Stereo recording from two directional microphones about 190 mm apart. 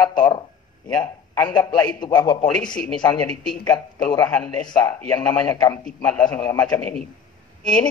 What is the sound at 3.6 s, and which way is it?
Speech, 20° left (ahead or behind).